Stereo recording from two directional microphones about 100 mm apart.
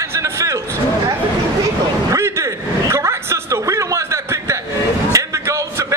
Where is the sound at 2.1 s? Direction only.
25° right (ahead or behind).